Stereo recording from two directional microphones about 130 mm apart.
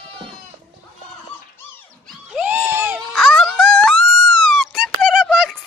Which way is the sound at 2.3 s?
10° right (ahead or behind).